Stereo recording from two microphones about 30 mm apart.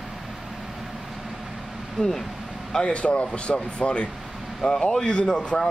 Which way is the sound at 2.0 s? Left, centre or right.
Centre.